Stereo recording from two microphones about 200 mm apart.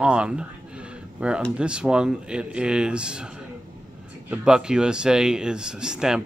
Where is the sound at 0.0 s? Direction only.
5° right (ahead or behind).